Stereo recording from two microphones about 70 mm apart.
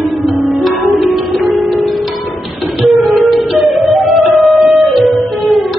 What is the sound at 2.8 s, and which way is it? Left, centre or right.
Music, centre.